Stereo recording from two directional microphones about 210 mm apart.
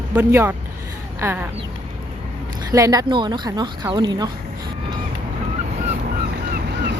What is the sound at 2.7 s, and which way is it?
A woman's voice, 15° right (ahead or behind).